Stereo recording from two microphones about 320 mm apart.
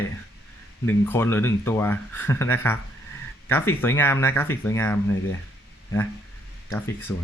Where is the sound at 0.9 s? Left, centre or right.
Centre.